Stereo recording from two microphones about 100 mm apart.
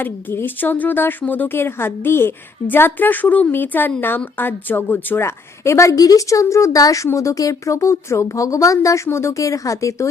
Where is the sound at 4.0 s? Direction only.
20° left (ahead or behind).